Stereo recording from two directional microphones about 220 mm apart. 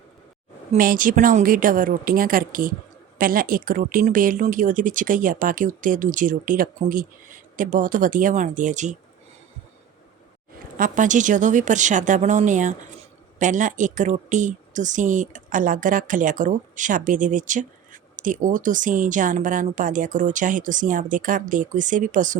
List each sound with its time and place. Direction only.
0.7 s speech: 40° right (ahead or behind)
10.8 s speech: 35° right (ahead or behind)